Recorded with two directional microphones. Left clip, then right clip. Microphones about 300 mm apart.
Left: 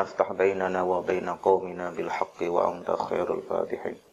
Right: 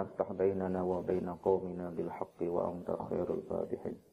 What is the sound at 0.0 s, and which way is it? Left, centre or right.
Speech, centre.